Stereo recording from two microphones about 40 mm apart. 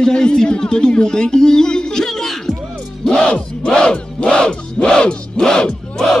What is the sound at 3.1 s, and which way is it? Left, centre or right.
Battle cry, centre.